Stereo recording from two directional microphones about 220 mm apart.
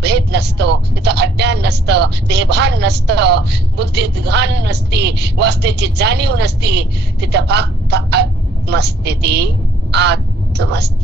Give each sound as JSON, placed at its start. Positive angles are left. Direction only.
{"t": 0.0, "sound": "speech", "side_deg": -50}